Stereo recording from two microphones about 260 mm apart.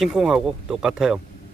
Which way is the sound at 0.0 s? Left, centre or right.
Centre.